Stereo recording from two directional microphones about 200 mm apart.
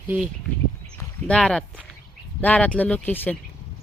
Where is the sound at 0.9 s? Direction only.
5° left (ahead or behind).